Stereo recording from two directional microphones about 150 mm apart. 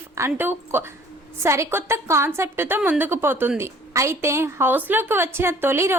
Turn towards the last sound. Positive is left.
turn(degrees=-15)  # may be behind; listen again after turning